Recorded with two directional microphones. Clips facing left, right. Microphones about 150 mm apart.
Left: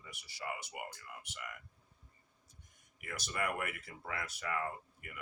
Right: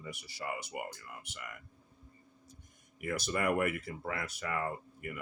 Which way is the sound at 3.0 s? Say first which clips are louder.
Right 6 dB; 45° right (ahead or behind).